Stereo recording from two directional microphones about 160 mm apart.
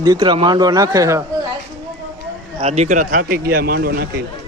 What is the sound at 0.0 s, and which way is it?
A man's voice, 25° right (ahead or behind).